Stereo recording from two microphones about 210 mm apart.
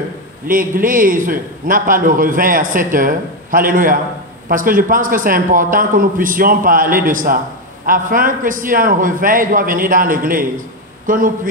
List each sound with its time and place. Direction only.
0.5 s a man's voice: 40° right (ahead or behind)